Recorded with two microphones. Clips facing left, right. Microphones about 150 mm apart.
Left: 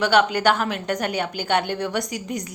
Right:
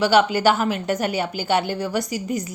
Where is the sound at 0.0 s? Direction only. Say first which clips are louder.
Right 2 dB; 5° right (ahead or behind).